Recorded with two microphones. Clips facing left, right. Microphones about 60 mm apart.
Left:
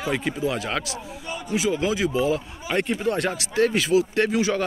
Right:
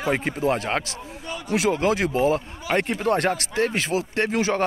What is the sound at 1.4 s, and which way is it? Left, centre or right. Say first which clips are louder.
A man's voice: right 2 dB; right.